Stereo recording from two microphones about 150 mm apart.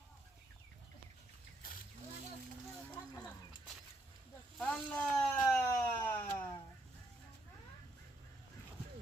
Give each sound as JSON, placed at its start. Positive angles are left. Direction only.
{"t": 4.5, "sound": "siren", "side_deg": 5}